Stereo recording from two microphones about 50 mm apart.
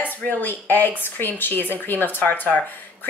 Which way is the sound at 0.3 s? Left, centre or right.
Left.